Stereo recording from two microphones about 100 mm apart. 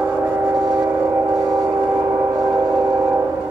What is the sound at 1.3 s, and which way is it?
Vehicle, 35° right (ahead or behind).